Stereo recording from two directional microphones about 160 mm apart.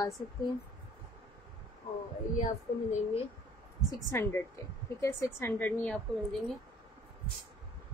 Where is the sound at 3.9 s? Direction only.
15° left (ahead or behind).